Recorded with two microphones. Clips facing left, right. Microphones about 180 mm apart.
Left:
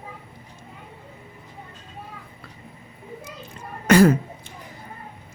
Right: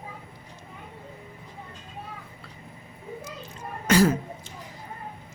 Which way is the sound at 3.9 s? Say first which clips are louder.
Left 5 dB; 60° left (ahead or behind).